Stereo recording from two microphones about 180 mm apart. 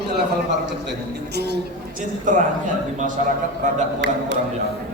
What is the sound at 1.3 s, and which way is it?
Speech, 70° right (ahead or behind).